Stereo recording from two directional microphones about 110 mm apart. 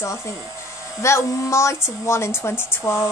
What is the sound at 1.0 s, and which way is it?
A woman's voice, 25° left (ahead or behind).